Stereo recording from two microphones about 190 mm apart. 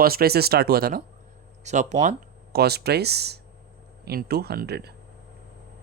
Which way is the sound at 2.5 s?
55° right (ahead or behind).